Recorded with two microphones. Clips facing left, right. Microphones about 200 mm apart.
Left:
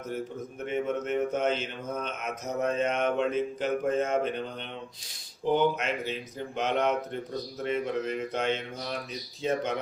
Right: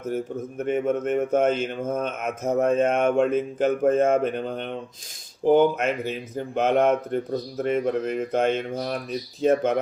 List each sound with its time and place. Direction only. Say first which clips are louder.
0.6 s speech: right 6 dB; 50° right (ahead or behind)